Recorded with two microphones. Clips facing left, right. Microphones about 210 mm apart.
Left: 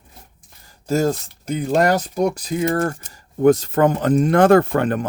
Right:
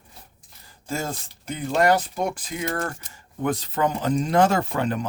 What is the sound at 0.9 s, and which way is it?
Speech, 40° left (ahead or behind).